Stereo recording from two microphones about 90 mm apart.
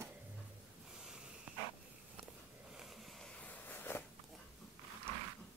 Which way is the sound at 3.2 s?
15° left (ahead or behind).